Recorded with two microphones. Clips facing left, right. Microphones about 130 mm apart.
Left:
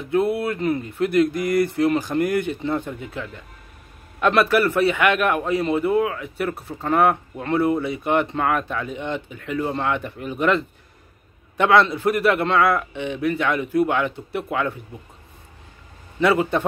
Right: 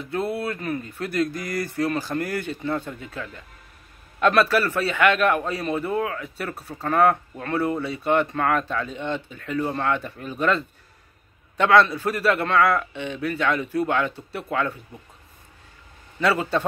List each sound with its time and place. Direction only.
0.1 s a man's voice: 20° left (ahead or behind)
16.2 s speech: 20° left (ahead or behind)